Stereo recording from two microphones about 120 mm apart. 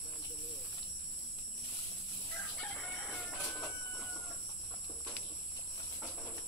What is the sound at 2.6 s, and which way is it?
Chicken, 5° left (ahead or behind).